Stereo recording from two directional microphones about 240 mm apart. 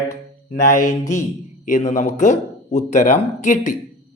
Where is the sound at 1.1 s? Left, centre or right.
Left.